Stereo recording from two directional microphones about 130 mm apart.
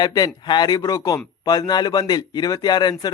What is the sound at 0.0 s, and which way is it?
Speech, 30° left (ahead or behind).